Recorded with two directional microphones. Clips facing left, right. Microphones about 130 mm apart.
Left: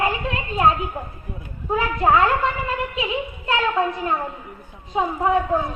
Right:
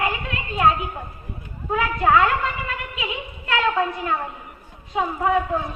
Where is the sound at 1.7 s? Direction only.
30° left (ahead or behind).